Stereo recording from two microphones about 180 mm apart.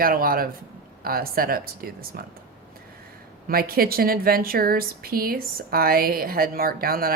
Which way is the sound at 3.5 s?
55° right (ahead or behind).